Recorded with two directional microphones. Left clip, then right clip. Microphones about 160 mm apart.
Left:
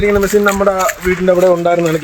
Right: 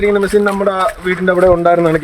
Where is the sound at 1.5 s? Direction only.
15° right (ahead or behind).